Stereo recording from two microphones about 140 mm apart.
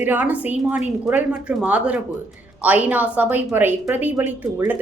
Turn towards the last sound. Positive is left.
turn(degrees=-15)  # may be behind; listen again after turning